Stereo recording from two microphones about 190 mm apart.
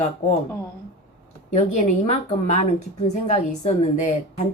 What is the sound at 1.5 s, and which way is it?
A woman's voice, 35° left (ahead or behind).